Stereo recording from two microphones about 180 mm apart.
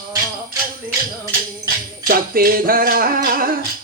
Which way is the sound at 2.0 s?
55° right (ahead or behind).